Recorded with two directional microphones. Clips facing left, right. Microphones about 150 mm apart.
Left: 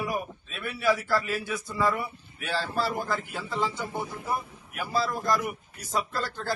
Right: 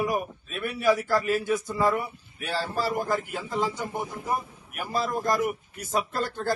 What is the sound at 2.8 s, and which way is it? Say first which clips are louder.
Speech: right 3 dB; 45° right (ahead or behind).